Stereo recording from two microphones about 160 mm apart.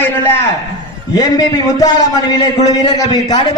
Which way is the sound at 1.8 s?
25° left (ahead or behind).